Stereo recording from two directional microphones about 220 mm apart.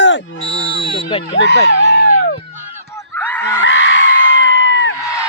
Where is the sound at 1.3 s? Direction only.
55° left (ahead or behind).